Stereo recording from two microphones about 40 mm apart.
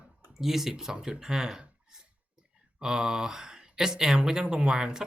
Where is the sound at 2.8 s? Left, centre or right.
Centre.